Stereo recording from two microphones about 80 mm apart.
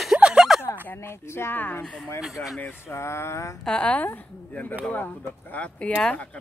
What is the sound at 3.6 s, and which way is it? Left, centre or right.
A man's voice, centre.